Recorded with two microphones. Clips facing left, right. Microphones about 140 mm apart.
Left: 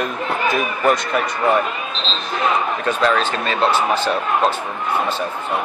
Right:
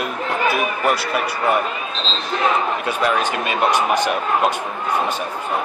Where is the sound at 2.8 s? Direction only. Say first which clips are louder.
Left 2 dB; 15° right (ahead or behind).